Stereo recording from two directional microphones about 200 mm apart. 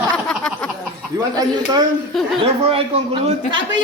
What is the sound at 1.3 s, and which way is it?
A man's voice, 20° right (ahead or behind).